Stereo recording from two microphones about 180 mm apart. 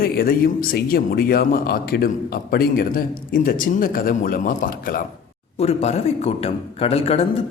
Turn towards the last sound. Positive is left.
turn(degrees=35)  # may be behind; listen again after turning